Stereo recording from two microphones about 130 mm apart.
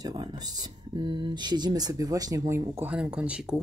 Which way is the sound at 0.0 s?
35° right (ahead or behind).